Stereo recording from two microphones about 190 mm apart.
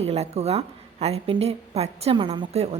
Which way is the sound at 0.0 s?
35° right (ahead or behind).